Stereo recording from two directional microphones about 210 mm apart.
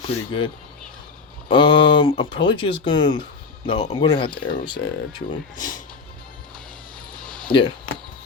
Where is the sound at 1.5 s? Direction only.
25° left (ahead or behind).